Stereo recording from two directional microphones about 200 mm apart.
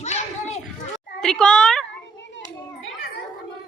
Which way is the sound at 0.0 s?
35° left (ahead or behind).